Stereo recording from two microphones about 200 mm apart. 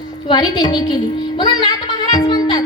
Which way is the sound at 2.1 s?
20° left (ahead or behind).